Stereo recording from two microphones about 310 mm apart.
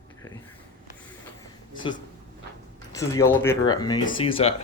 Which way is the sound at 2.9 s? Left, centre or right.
Centre.